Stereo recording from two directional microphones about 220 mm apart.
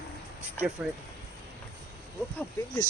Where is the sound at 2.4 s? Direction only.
15° left (ahead or behind).